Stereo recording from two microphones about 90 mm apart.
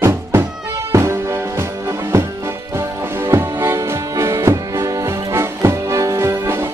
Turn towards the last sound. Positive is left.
turn(degrees=-30)  # may be behind; listen again after turning